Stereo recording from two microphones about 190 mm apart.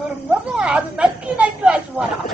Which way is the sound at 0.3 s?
5° right (ahead or behind).